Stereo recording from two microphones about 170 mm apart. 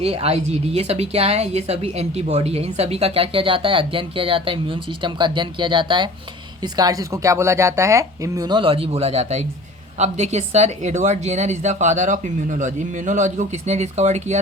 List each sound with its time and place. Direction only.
0.0 s a woman's voice: 35° right (ahead or behind)